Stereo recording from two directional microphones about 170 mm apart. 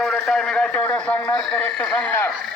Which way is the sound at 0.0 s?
Centre (ahead or behind).